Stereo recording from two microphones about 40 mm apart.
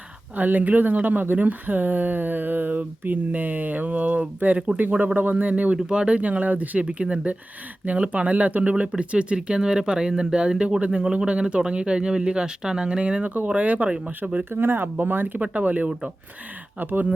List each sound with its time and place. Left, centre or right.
0.3 s speech: right
4.5 s speech: right
4.8 s speech: right
5.7 s speech: right
6.8 s speech: right
9.0 s speech: right
13.5 s speech: right
14.5 s speech: right
15.4 s speech: right